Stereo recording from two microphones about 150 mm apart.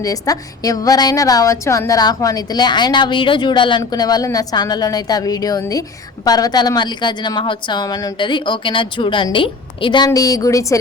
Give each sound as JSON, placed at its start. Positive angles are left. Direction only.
{"t": 0.0, "sound": "a woman's voice", "side_deg": 25}